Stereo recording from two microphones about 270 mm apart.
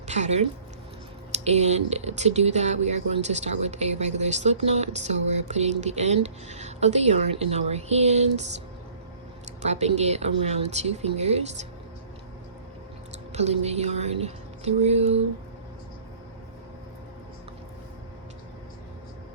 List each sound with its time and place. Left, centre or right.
0.1 s speech: right
9.6 s speech: right
13.3 s speech: right